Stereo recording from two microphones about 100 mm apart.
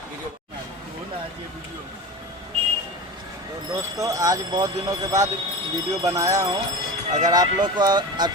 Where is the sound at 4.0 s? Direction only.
35° right (ahead or behind).